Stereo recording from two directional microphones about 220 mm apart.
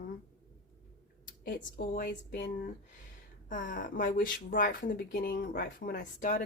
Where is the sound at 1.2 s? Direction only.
40° left (ahead or behind).